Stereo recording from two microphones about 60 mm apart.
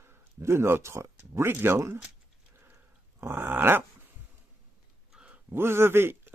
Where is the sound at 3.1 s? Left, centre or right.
Right.